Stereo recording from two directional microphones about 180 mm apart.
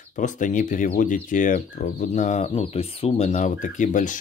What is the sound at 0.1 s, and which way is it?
Speech, 45° left (ahead or behind).